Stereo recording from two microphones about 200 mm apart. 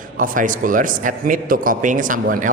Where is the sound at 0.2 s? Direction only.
45° right (ahead or behind).